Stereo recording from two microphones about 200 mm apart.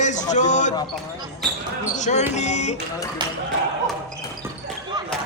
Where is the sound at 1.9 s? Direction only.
35° left (ahead or behind).